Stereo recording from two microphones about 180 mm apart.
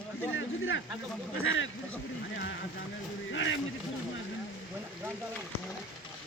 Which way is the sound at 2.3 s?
75° left (ahead or behind).